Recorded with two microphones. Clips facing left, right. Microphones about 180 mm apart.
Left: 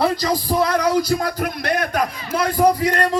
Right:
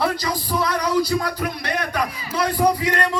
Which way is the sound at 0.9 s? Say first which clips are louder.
Left 1 dB; 45° left (ahead or behind).